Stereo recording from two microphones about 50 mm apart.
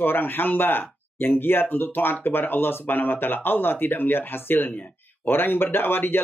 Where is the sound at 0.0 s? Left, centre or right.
Left.